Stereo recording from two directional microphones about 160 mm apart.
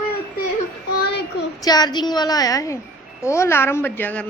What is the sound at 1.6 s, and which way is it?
A woman's voice, 25° left (ahead or behind).